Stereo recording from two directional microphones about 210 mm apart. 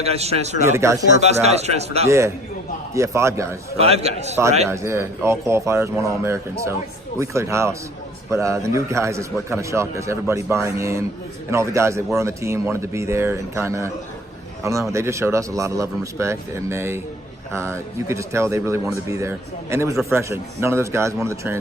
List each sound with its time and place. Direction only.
0.0 s a man's voice: 30° right (ahead or behind)
0.7 s speech: 15° right (ahead or behind)
1.2 s speech: 30° right (ahead or behind)
2.0 s speech: 15° right (ahead or behind)
3.8 s a man's voice: 30° right (ahead or behind)
4.7 s speech: 10° right (ahead or behind)